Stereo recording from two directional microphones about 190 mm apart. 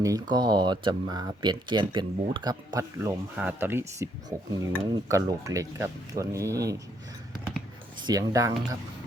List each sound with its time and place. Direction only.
0.0 s speech: 20° right (ahead or behind)
8.0 s speech: 20° right (ahead or behind)